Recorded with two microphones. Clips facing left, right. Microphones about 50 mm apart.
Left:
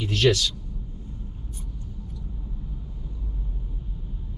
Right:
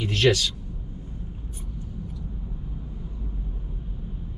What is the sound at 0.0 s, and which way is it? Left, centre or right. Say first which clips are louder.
Speech: even; centre.